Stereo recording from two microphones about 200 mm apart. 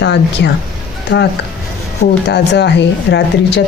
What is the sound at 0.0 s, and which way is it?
Speech, 60° left (ahead or behind).